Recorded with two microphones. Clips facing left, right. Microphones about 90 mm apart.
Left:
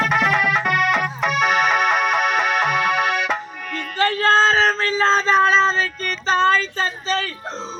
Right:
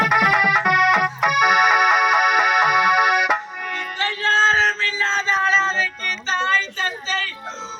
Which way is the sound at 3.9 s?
45° left (ahead or behind).